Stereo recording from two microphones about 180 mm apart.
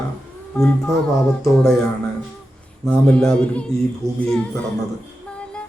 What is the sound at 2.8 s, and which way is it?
Music, 5° left (ahead or behind).